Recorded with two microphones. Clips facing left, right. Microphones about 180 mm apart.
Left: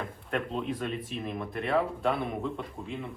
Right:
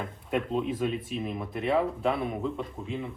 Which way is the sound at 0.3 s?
5° right (ahead or behind).